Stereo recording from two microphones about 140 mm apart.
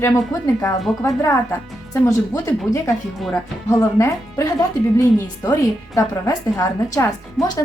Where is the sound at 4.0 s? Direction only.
25° left (ahead or behind).